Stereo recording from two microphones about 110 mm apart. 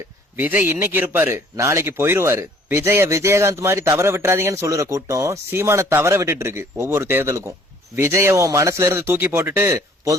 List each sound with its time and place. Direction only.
0.3 s a man's voice: 15° right (ahead or behind)